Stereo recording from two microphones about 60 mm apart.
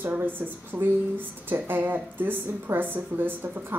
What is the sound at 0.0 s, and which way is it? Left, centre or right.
Speech, right.